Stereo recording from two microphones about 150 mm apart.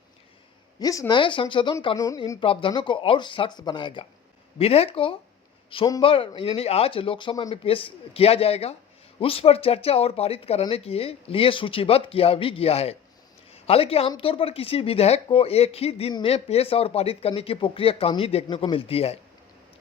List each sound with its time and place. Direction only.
0.8 s speech: 25° left (ahead or behind)
2.4 s a woman's voice: 35° left (ahead or behind)